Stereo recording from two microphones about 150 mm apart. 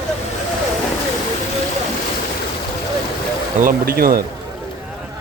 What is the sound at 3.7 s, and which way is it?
Speech, 75° right (ahead or behind).